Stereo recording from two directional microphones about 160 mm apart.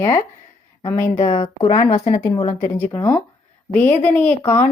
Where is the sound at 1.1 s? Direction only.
40° left (ahead or behind).